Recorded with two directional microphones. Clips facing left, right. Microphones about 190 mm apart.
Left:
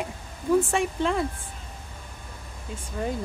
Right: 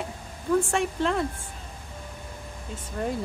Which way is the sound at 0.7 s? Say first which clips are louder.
Even; centre (ahead or behind).